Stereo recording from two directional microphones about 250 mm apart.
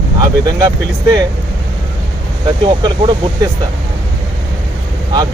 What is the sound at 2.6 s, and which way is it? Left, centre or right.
Speech, centre.